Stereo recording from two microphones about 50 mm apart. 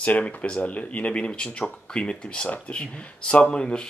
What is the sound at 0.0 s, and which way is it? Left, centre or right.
Speech, left.